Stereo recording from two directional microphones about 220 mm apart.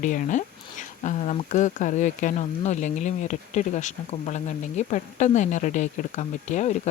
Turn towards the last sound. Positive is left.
turn(degrees=35)  # may be behind; listen again after turning